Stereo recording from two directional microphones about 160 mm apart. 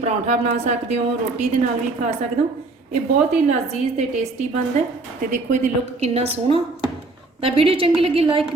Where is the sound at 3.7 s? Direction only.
45° right (ahead or behind).